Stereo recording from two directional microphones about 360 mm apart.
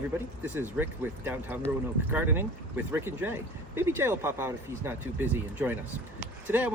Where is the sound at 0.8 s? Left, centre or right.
Centre.